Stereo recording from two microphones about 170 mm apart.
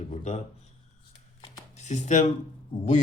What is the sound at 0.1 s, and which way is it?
Speech, 40° left (ahead or behind).